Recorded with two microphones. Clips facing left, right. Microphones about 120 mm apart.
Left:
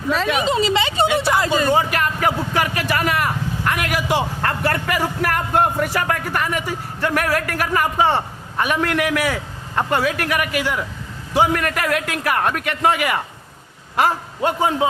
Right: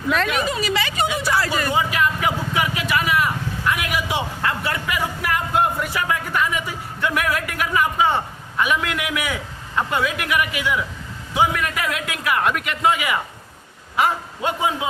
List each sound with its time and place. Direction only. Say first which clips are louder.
0.4 s speech: left 5 dB; 25° left (ahead or behind)
1.0 s a sound: left 5 dB; 65° left (ahead or behind)
1.3 s vehicle: left 4 dB; 20° left (ahead or behind)
1.7 s a sound: left 2 dB; 55° left (ahead or behind)
2.7 s vehicle: left 1 dB; 55° left (ahead or behind)
8.5 s a man's voice: left 2 dB; 45° left (ahead or behind)